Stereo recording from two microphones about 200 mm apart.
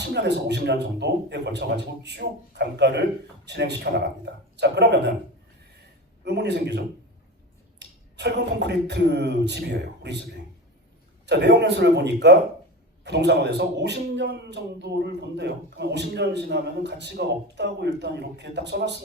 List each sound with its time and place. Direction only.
0.0 s a man's voice: 55° right (ahead or behind)
6.2 s a man's voice: 55° right (ahead or behind)
7.8 s a sound: 60° right (ahead or behind)
11.3 s a man's voice: 60° right (ahead or behind)